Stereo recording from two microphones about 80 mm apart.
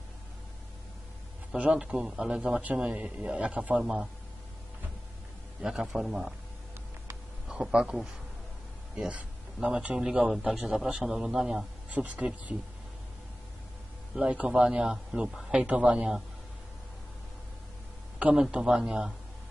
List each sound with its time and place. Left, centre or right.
1.5 s a man's voice: centre
5.6 s a man's voice: centre
7.4 s a man's voice: centre
11.9 s a man's voice: centre
14.1 s a man's voice: centre
18.2 s a man's voice: centre